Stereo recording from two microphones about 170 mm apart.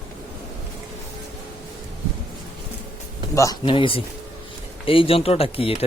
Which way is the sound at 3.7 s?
30° left (ahead or behind).